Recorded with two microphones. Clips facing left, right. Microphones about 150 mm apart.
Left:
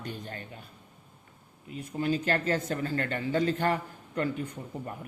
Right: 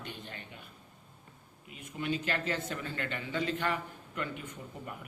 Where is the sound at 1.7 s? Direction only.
35° left (ahead or behind).